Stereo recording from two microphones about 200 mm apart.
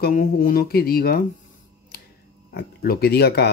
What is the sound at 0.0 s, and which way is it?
Speech, 45° left (ahead or behind).